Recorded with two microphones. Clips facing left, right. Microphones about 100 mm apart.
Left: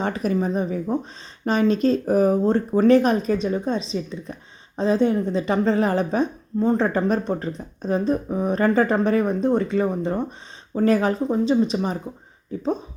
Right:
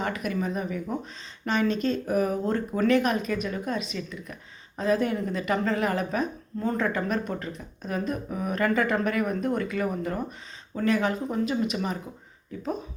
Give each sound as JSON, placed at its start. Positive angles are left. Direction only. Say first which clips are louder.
{"t": 0.0, "sound": "a woman's voice", "louder": "left 6 dB", "side_deg": 35}